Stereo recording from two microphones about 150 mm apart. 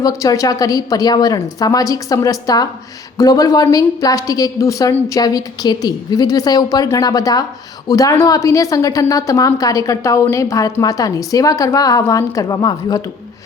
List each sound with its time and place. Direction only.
0.0 s a woman's voice: 25° left (ahead or behind)